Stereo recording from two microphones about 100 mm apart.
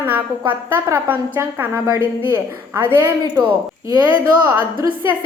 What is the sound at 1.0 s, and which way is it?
A woman's voice, 20° right (ahead or behind).